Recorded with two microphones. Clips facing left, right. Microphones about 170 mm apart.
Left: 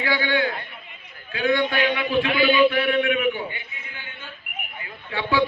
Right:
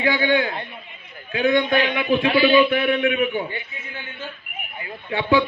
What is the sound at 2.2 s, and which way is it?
Speech, 35° right (ahead or behind).